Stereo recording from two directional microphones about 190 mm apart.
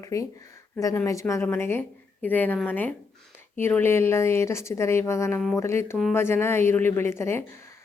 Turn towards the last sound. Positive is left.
turn(degrees=15)  # may be behind; listen again after turning